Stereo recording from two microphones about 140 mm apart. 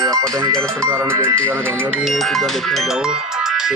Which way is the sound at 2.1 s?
Centre (ahead or behind).